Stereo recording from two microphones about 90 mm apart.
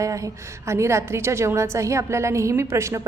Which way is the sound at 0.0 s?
35° right (ahead or behind).